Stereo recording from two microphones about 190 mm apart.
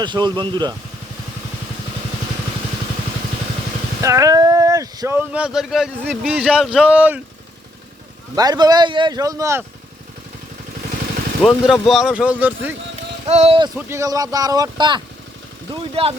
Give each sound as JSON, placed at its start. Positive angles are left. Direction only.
{"t": 0.0, "sound": "speech", "side_deg": -25}
{"t": 4.0, "sound": "speech", "side_deg": -15}
{"t": 8.4, "sound": "speech", "side_deg": -20}
{"t": 11.4, "sound": "speech", "side_deg": 0}
{"t": 13.2, "sound": "speech", "side_deg": -35}
{"t": 13.7, "sound": "speech", "side_deg": -15}